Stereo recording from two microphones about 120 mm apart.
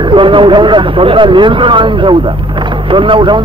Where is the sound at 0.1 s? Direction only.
45° right (ahead or behind).